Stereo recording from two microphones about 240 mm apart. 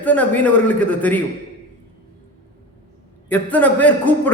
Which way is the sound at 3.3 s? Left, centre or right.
Centre.